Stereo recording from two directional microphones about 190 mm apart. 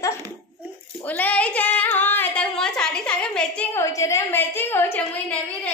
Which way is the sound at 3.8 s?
15° left (ahead or behind).